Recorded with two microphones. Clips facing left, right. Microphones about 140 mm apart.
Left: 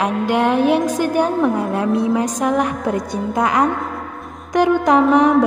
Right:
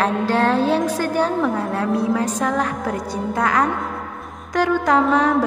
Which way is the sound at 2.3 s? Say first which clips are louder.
Left 3 dB; 15° left (ahead or behind).